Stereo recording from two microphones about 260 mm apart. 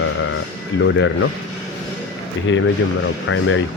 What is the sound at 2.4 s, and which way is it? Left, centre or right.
Speech, left.